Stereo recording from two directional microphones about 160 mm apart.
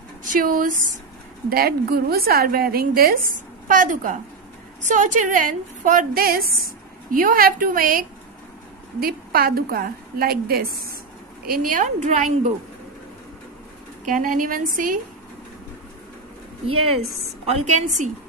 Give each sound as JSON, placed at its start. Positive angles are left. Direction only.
{"t": 0.3, "sound": "a woman's voice", "side_deg": -60}
{"t": 11.4, "sound": "a woman's voice", "side_deg": -55}
{"t": 14.0, "sound": "a woman's voice", "side_deg": -55}
{"t": 17.5, "sound": "a woman's voice", "side_deg": -45}